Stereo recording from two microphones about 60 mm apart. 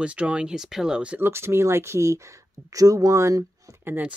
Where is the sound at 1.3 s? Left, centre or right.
Right.